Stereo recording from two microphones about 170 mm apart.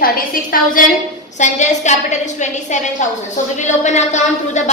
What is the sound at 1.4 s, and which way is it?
A woman's voice, 45° left (ahead or behind).